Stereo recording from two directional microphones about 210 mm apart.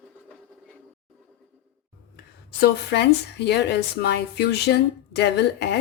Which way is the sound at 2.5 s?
50° left (ahead or behind).